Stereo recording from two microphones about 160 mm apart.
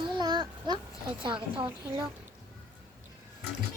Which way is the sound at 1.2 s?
30° right (ahead or behind).